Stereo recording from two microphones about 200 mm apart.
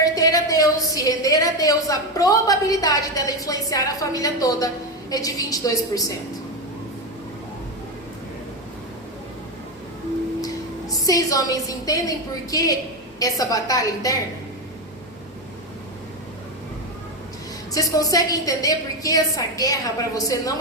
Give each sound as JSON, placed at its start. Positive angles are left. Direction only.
{"t": 0.0, "sound": "a woman's voice", "side_deg": 20}
{"t": 10.9, "sound": "a woman's voice", "side_deg": 15}
{"t": 17.7, "sound": "a woman's voice", "side_deg": 15}